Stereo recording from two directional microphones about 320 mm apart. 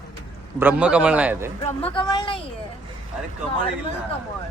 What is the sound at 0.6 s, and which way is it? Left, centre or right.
Speech, centre.